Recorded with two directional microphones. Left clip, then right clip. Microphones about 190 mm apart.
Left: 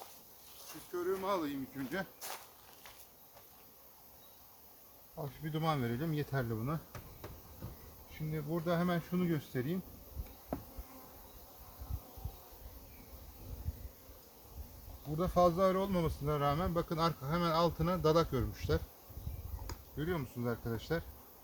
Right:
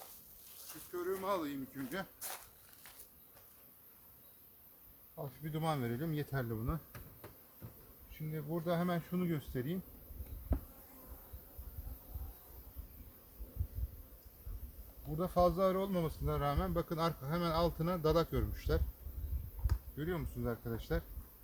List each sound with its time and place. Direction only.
0.6 s speech: 30° right (ahead or behind)
5.1 s speech: 5° right (ahead or behind)
8.3 s speech: 5° right (ahead or behind)
15.2 s speech: 5° right (ahead or behind)